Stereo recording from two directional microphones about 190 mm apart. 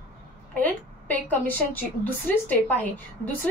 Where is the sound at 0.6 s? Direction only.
10° left (ahead or behind).